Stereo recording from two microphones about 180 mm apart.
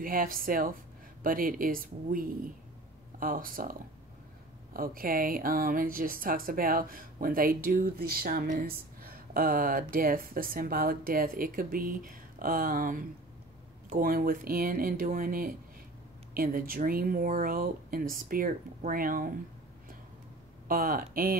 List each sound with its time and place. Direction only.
0.0 s speech: 50° right (ahead or behind)
4.7 s speech: 55° right (ahead or behind)
20.6 s speech: 55° right (ahead or behind)